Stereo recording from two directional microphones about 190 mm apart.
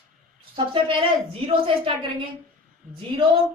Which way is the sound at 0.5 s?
25° right (ahead or behind).